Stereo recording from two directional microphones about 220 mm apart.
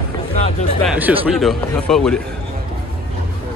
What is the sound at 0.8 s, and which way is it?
Speech, 5° right (ahead or behind).